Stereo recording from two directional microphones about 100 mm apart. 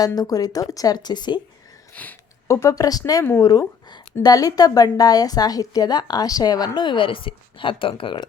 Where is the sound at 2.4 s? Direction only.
30° left (ahead or behind).